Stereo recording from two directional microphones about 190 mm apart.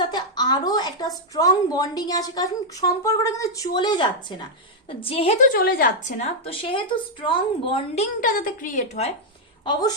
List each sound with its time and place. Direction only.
0.0 s a woman's voice: 20° left (ahead or behind)
5.5 s speech: 50° left (ahead or behind); by 8.0 s 30° left (ahead or behind)
8.2 s a woman's voice: 45° left (ahead or behind)